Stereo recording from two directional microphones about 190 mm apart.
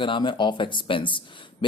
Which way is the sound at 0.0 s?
25° left (ahead or behind).